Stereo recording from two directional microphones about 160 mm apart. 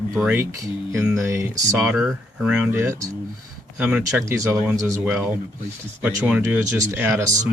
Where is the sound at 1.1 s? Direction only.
20° right (ahead or behind).